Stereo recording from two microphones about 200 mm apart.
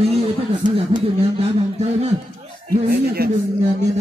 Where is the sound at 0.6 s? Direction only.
40° right (ahead or behind).